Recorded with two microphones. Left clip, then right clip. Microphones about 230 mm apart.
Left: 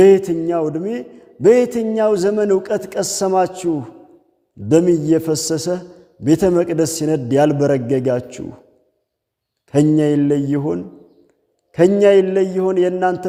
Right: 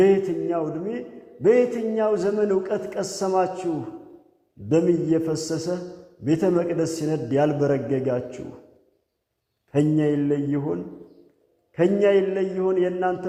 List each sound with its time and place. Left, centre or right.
0.0 s a man's voice: left
4.7 s a man's voice: left
9.6 s a man's voice: left